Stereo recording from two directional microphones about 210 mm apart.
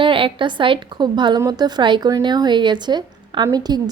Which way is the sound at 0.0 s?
25° right (ahead or behind).